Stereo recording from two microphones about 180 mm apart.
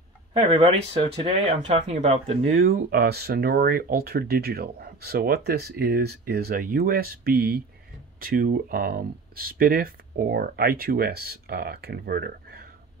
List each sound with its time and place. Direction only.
0.3 s speech: 30° right (ahead or behind)
2.5 s speech: 55° right (ahead or behind)